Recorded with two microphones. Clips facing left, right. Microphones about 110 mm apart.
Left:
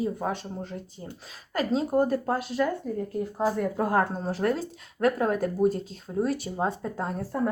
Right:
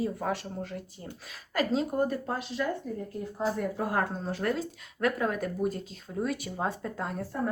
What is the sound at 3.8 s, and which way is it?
Speech, 45° left (ahead or behind).